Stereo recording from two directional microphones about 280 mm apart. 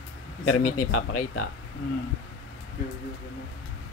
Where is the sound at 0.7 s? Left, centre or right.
Left.